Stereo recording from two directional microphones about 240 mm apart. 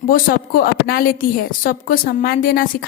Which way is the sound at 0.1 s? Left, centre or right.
Left.